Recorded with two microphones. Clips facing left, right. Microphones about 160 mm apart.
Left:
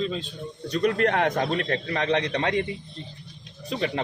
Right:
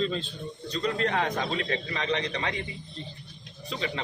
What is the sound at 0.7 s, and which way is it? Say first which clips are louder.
A man's voice: left 6 dB; 60° left (ahead or behind).